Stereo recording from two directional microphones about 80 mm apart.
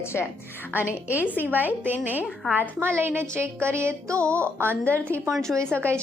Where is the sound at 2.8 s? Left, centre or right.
Right.